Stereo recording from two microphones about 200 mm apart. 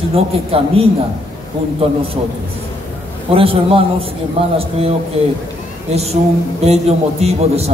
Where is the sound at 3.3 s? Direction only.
30° right (ahead or behind).